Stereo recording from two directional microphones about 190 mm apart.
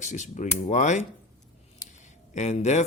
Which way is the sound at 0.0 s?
40° left (ahead or behind).